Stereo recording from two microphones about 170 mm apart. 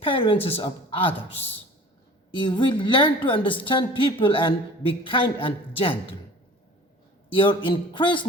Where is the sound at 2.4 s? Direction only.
30° left (ahead or behind).